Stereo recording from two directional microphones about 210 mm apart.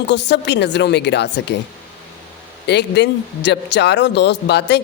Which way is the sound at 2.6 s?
55° left (ahead or behind).